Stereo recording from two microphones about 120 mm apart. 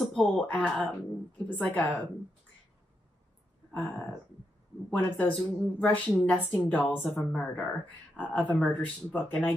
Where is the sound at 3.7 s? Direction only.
10° left (ahead or behind).